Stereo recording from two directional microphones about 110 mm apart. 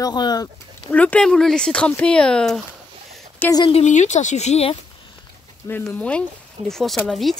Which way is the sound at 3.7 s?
90° left.